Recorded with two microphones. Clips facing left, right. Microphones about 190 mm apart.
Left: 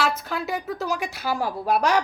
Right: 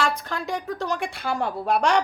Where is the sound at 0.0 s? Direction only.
5° left (ahead or behind).